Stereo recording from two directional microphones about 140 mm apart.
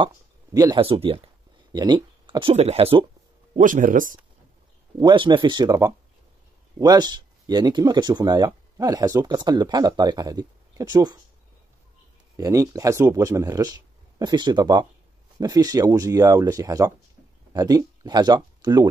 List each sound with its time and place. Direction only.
0.0 s a sound: 25° right (ahead or behind)
0.7 s speech: 40° right (ahead or behind)
1.7 s speech: 30° right (ahead or behind)
2.2 s a sound: 35° right (ahead or behind)
2.5 s speech: 50° right (ahead or behind)
3.5 s speech: 65° right (ahead or behind)
4.9 s speech: 35° right (ahead or behind)
12.4 s speech: 25° right (ahead or behind)